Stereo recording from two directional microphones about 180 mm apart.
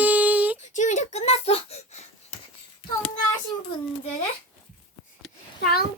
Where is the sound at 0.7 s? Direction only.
40° left (ahead or behind).